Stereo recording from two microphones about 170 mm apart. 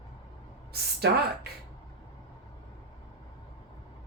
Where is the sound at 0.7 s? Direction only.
70° right (ahead or behind).